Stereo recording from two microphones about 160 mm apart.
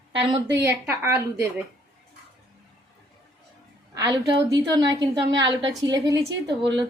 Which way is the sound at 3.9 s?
25° right (ahead or behind).